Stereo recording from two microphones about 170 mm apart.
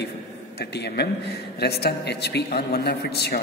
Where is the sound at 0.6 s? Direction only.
75° left (ahead or behind).